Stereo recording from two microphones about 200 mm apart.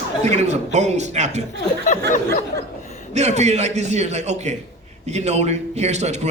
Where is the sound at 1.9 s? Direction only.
40° left (ahead or behind).